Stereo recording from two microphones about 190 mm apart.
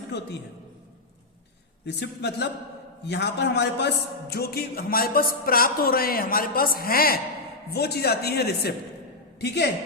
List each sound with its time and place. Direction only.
0.1 s a man's voice: 60° left (ahead or behind)
1.8 s a man's voice: 60° left (ahead or behind)